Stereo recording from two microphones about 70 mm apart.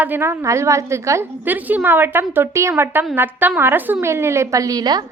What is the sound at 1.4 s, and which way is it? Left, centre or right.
A woman's voice, right.